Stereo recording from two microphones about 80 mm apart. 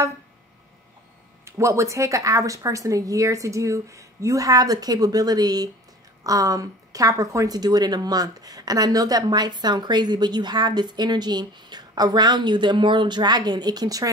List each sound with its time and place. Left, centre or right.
1.4 s a woman's voice: right